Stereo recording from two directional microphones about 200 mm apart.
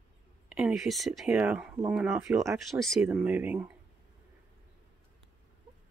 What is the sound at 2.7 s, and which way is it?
Speech, centre (ahead or behind).